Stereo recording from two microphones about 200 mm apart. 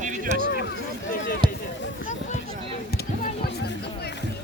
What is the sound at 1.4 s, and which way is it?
Run, 25° right (ahead or behind).